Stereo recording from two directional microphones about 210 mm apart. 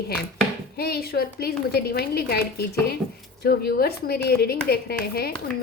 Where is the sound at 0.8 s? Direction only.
45° left (ahead or behind).